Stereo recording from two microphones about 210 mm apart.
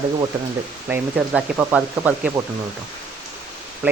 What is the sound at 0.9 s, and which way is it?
Speech, 10° right (ahead or behind).